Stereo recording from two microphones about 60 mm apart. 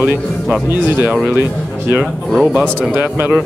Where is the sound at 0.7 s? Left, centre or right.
Right.